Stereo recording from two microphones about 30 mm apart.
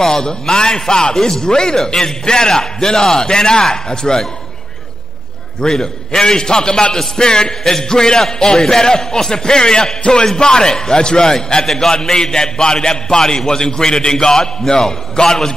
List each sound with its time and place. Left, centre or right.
0.0 s a man's voice: left
5.7 s a man's voice: centre
11.6 s a man's voice: centre
11.9 s a man's voice: left
14.3 s a man's voice: centre
14.7 s a man's voice: left